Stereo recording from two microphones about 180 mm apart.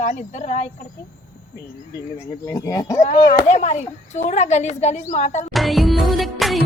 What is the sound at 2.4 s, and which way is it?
Speech, 20° left (ahead or behind).